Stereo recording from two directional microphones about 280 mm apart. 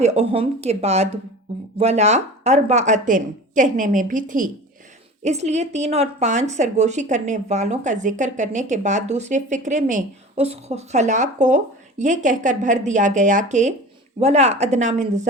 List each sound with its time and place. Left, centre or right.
0.0 s a woman's voice: right